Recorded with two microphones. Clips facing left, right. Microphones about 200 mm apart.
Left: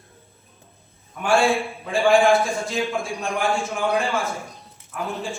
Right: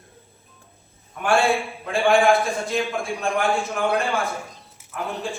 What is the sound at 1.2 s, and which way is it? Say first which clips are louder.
A man's voice: left 1 dB; centre (ahead or behind).